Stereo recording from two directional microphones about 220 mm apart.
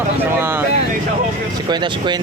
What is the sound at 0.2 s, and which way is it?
Speech, 10° right (ahead or behind).